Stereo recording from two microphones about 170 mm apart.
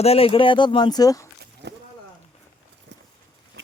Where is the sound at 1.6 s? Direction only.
90° right.